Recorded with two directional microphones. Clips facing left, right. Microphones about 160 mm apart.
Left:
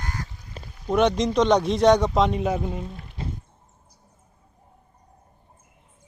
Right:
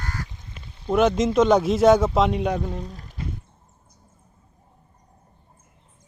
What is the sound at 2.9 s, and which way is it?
Speech, 40° right (ahead or behind).